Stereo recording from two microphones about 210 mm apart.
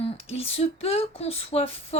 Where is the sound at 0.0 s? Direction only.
30° left (ahead or behind).